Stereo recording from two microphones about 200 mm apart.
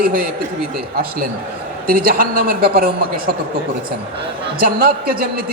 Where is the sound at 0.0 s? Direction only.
45° right (ahead or behind).